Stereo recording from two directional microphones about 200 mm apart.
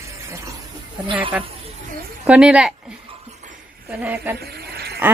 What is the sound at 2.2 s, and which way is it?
Speech, 5° right (ahead or behind).